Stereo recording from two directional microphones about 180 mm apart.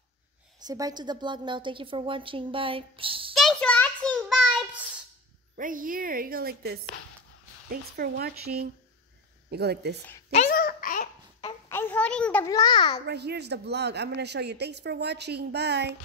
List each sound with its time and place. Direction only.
0.6 s a woman's voice: 20° right (ahead or behind)
3.3 s a child's voice: 5° left (ahead or behind)
5.6 s a woman's voice: 50° right (ahead or behind); by 10.0 s 65° right (ahead or behind)
10.5 s a sound: 55° left (ahead or behind)
11.7 s a sound: 10° left (ahead or behind)
12.4 s a child's voice: 20° left (ahead or behind)
13.0 s speech: 65° right (ahead or behind)